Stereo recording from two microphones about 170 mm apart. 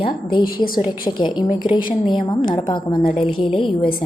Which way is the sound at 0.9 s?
25° left (ahead or behind).